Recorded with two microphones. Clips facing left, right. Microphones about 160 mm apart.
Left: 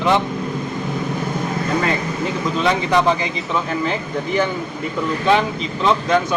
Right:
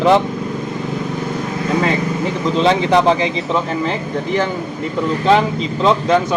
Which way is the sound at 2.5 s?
30° right (ahead or behind).